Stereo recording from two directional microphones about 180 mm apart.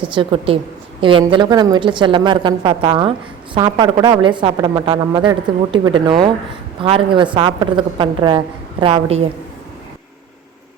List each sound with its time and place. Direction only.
0.1 s a woman's voice: 30° right (ahead or behind)